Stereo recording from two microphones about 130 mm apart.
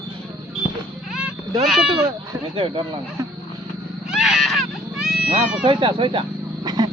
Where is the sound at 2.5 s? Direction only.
40° right (ahead or behind).